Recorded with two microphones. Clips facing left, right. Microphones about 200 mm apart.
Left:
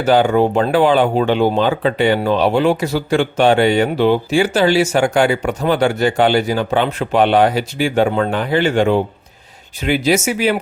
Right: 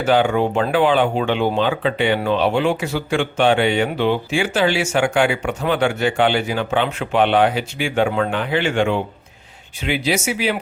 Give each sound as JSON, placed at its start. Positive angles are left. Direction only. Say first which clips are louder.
{"t": 0.0, "sound": "speech", "louder": "left 4 dB", "side_deg": 40}